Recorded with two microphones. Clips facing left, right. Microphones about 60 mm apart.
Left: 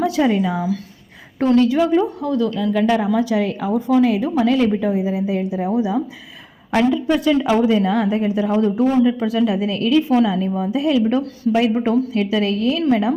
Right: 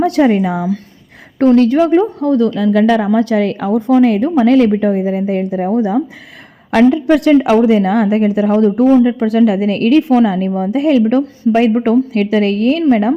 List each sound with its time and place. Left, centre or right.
0.0 s a woman's voice: right
2.7 s a woman's voice: right